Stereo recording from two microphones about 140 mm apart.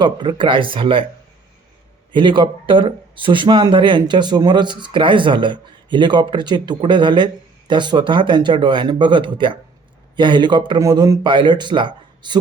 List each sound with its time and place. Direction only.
0.0 s speech: 35° right (ahead or behind)
2.1 s speech: 35° right (ahead or behind)